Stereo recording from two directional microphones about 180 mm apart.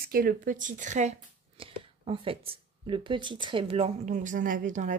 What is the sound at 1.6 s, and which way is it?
Speech, 30° right (ahead or behind).